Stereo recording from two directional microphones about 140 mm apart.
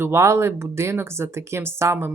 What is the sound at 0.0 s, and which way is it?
Speech, 20° right (ahead or behind).